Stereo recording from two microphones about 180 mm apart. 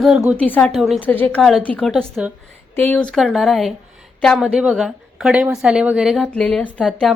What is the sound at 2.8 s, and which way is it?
Speech, 10° left (ahead or behind).